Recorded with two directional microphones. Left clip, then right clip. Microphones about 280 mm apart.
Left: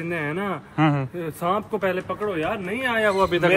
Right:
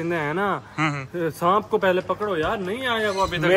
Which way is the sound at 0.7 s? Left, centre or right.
Centre.